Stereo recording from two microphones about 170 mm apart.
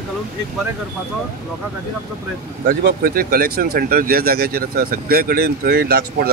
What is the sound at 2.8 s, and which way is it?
Speech, 60° right (ahead or behind).